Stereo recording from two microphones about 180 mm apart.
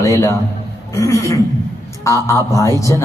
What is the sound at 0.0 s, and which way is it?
A man's voice, 15° left (ahead or behind).